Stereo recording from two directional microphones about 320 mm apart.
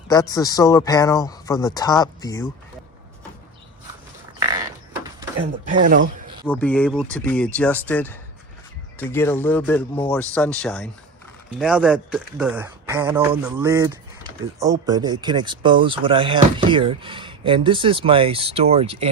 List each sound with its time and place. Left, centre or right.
0.1 s speech: centre
4.4 s a sound: centre
5.6 s speech: right
6.4 s speech: centre